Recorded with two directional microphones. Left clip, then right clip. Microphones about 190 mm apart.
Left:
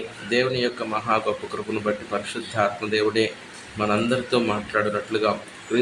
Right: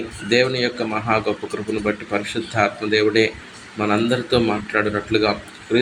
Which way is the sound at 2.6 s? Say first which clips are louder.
Right 4 dB; 5° right (ahead or behind).